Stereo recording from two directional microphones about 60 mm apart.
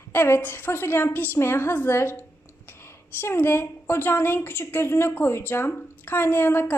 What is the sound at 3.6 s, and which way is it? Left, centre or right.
A woman's voice, left.